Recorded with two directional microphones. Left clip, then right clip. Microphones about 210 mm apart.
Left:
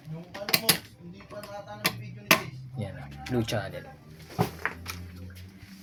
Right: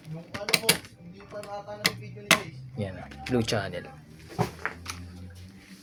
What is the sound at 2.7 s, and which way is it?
Speech, 20° right (ahead or behind).